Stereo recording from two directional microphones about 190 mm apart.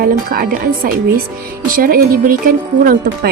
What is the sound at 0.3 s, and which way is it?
A woman's voice, 50° right (ahead or behind).